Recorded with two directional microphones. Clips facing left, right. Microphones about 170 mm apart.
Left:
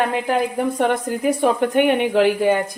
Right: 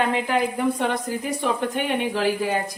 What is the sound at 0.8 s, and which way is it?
Speech, 50° left (ahead or behind).